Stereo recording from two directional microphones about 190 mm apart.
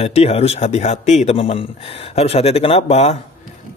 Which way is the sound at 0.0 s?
35° left (ahead or behind).